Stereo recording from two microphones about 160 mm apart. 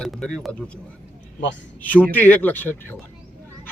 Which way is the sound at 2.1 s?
10° left (ahead or behind).